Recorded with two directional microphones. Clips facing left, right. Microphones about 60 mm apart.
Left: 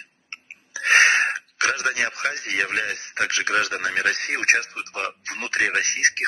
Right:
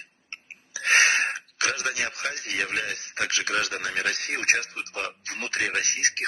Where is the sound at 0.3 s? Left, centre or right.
Left.